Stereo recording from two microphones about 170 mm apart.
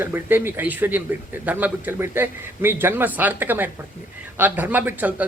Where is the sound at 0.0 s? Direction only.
15° right (ahead or behind).